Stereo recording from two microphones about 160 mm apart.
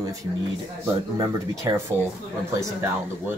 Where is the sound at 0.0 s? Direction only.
20° right (ahead or behind).